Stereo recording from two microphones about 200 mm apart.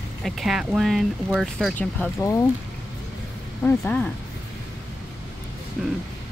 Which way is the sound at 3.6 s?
10° left (ahead or behind).